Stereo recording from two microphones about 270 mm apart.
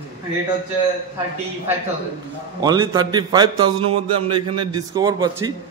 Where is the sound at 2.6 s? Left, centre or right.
Centre.